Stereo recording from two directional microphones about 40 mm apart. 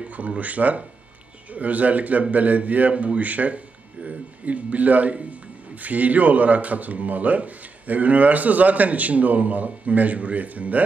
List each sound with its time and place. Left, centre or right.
0.1 s speech: right